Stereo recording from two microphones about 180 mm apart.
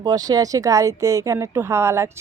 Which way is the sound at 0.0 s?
20° right (ahead or behind).